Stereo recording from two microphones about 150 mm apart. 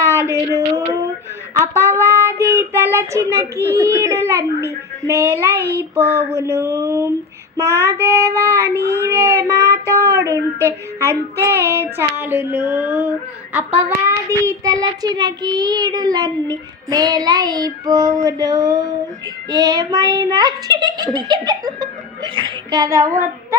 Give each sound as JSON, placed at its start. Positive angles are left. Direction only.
{"t": 0.0, "sound": "a sound", "side_deg": -15}
{"t": 1.5, "sound": "child singing", "side_deg": -20}
{"t": 8.7, "sound": "speech", "side_deg": 15}
{"t": 9.0, "sound": "child singing", "side_deg": -20}
{"t": 10.6, "sound": "a sound", "side_deg": -20}
{"t": 13.5, "sound": "child singing", "side_deg": -10}
{"t": 19.5, "sound": "a child's voice", "side_deg": -25}